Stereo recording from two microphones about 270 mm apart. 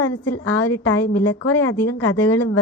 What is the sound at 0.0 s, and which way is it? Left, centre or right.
A woman's voice, left.